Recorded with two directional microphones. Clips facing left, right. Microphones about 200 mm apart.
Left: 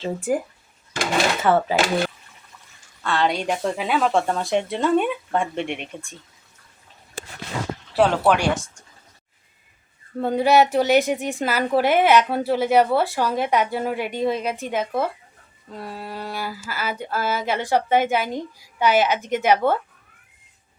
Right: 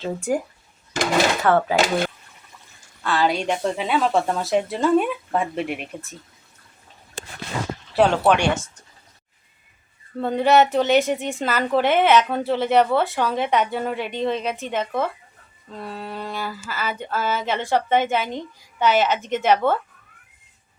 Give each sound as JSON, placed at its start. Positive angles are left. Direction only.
{"t": 0.0, "sound": "speech", "side_deg": 0}
{"t": 1.4, "sound": "speech", "side_deg": 0}
{"t": 7.9, "sound": "speech", "side_deg": 0}
{"t": 10.2, "sound": "a sound", "side_deg": 10}